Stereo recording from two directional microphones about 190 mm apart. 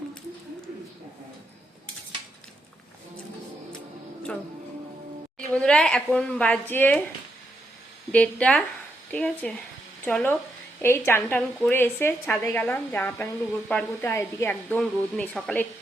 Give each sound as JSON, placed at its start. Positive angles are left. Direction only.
{"t": 5.5, "sound": "a woman's voice", "side_deg": 5}
{"t": 8.1, "sound": "a woman's voice", "side_deg": 5}